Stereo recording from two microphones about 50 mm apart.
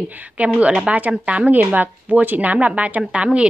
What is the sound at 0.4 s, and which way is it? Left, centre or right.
A woman's voice, right.